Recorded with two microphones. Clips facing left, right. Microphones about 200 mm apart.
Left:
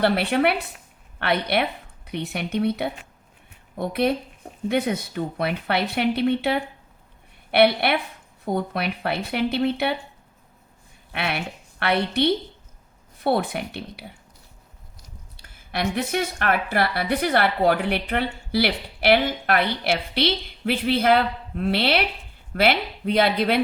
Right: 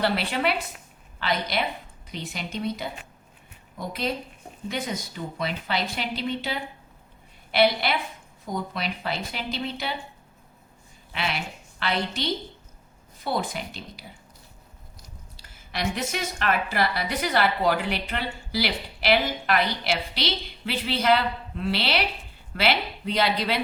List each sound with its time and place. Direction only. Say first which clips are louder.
0.0 s speech: left 5 dB; 55° left (ahead or behind)
11.1 s a woman's voice: left 3 dB; 60° left (ahead or behind)
15.4 s speech: left 4 dB; 55° left (ahead or behind)